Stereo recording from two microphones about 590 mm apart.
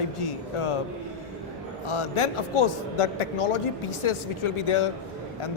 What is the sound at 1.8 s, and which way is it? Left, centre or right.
A man's voice, left.